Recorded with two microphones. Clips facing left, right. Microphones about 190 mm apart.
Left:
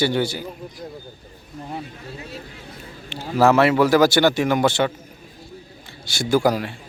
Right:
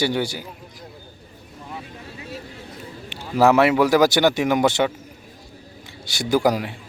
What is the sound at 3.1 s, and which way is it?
Speech, 15° right (ahead or behind).